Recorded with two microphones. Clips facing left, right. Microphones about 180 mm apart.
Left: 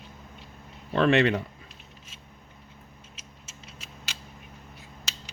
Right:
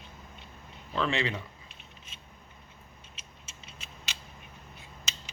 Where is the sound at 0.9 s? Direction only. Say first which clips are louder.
Left 9 dB; 65° left (ahead or behind).